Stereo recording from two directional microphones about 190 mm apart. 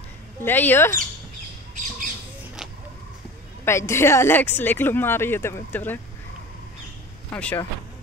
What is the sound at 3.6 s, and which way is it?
Speech, 15° left (ahead or behind).